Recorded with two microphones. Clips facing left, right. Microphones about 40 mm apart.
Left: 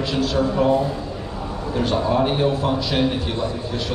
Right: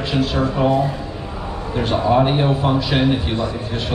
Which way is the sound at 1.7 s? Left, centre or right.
Centre.